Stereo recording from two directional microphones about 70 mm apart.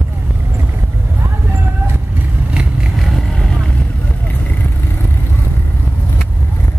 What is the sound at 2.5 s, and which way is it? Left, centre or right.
Vehicle, centre.